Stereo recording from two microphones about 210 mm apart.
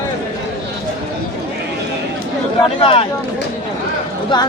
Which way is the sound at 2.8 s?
25° left (ahead or behind).